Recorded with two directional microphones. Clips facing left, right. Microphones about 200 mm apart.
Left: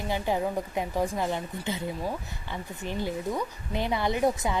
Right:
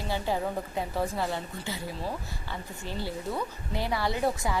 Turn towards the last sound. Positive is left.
turn(degrees=20)  # may be behind; listen again after turning